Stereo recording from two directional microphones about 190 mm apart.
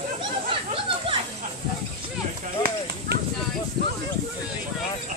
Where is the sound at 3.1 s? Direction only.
60° right (ahead or behind).